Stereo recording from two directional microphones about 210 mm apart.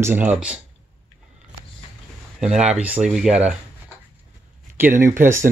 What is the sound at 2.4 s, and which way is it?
Speech, 5° right (ahead or behind).